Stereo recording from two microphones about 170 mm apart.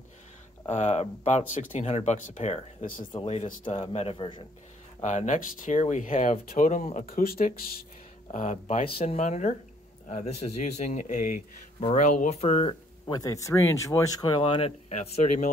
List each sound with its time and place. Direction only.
0.7 s speech: 40° left (ahead or behind)
5.0 s speech: 45° left (ahead or behind); by 7.8 s 60° left (ahead or behind)
8.3 s speech: 45° left (ahead or behind)
8.8 s speech: 35° left (ahead or behind)
13.0 s speech: 20° left (ahead or behind); by 15.4 s 40° left (ahead or behind)